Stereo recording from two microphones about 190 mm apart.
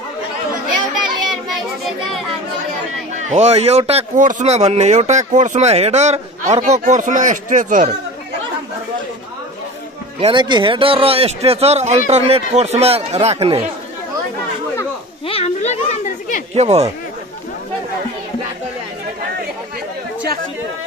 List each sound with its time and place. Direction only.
3.2 s speech: 35° right (ahead or behind)
10.2 s speech: 25° right (ahead or behind)
15.2 s a sound: 35° left (ahead or behind)
16.5 s speech: 35° right (ahead or behind)